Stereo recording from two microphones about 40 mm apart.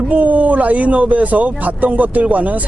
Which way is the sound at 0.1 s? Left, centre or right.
Right.